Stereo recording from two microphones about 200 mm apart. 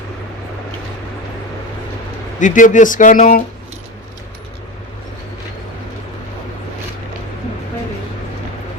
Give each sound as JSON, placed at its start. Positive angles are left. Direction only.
{"t": 2.4, "sound": "speech", "side_deg": 40}